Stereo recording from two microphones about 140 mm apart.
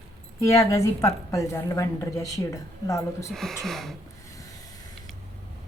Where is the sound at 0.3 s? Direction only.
25° left (ahead or behind).